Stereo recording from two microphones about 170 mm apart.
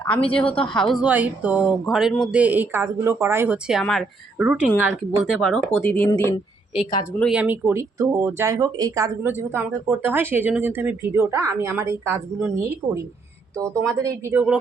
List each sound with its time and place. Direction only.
0.0 s speech: 5° left (ahead or behind)
7.3 s speech: 10° right (ahead or behind)